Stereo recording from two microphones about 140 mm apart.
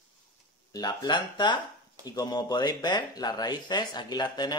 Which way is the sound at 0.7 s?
25° left (ahead or behind).